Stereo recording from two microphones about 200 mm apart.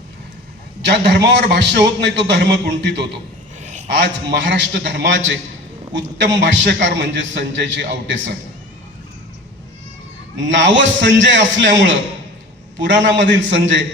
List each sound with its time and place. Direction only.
0.8 s a man's voice: 60° right (ahead or behind)
3.6 s a sound: 35° right (ahead or behind)
3.8 s a man's voice: 60° right (ahead or behind)
10.3 s a man's voice: 65° right (ahead or behind)